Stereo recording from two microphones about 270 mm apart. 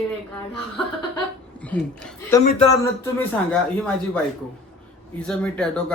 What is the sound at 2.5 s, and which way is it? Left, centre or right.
Speech, left.